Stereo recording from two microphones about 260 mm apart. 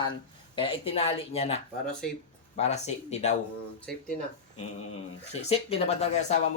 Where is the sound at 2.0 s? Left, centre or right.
Centre.